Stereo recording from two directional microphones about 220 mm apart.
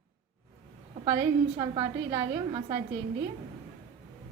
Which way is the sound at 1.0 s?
20° right (ahead or behind).